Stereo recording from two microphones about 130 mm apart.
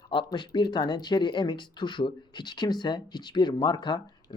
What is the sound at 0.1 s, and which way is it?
Speech, 35° left (ahead or behind).